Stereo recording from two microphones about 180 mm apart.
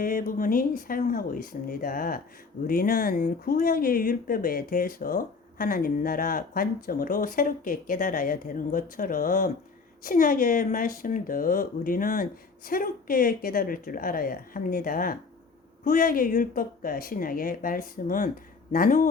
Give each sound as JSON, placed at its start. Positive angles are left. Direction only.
{"t": 0.0, "sound": "speech", "side_deg": 50}